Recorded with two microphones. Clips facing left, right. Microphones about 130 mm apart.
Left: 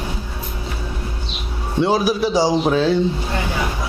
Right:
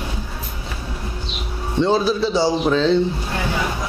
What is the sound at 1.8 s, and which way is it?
A man's voice, 10° left (ahead or behind).